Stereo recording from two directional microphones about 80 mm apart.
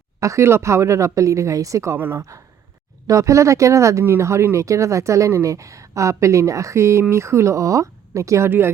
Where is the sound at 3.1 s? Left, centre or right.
Right.